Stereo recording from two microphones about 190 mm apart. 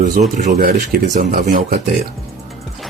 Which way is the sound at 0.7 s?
50° right (ahead or behind).